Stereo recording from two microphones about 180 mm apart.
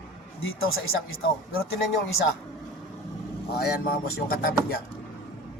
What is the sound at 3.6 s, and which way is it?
A man's voice, 60° left (ahead or behind).